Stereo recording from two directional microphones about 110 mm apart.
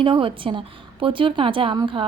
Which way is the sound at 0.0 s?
50° right (ahead or behind).